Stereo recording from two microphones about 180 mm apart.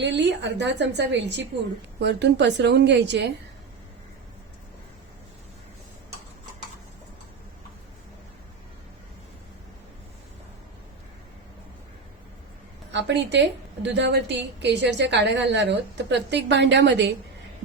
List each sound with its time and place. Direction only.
0.0 s a woman's voice: 75° right (ahead or behind)
12.9 s a woman's voice: 75° right (ahead or behind)